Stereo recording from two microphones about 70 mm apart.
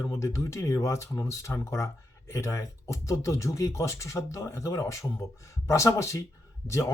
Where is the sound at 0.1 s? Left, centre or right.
Left.